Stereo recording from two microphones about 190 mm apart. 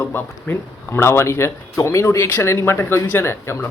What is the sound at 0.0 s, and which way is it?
Speech, 10° left (ahead or behind).